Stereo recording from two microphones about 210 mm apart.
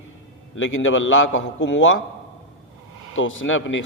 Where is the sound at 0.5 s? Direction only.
65° left (ahead or behind).